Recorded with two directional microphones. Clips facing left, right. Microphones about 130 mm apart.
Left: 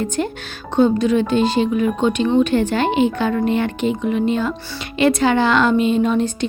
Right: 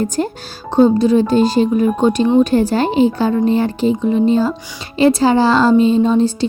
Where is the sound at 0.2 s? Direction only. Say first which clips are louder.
Right 3 dB; 35° right (ahead or behind).